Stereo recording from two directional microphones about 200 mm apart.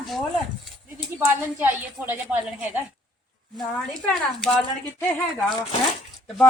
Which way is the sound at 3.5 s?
5° left (ahead or behind).